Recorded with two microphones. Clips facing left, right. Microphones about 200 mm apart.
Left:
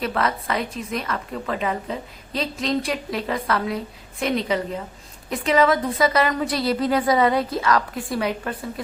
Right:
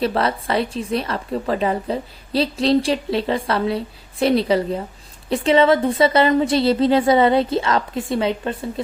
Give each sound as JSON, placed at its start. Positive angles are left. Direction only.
{"t": 0.0, "sound": "a woman's voice", "side_deg": -30}